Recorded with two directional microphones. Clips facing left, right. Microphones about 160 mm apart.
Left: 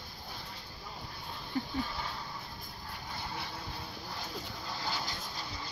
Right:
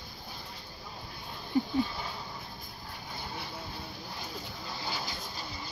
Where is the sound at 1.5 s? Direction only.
15° right (ahead or behind).